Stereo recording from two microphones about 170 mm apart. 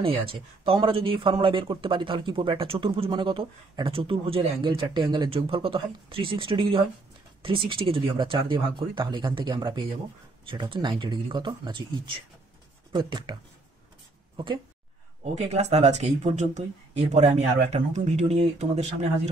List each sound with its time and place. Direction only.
0.7 s speech: 30° right (ahead or behind)
15.3 s speech: 40° right (ahead or behind)